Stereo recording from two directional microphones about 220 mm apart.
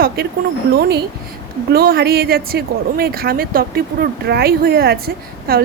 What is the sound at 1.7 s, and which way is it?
Speech, 45° right (ahead or behind).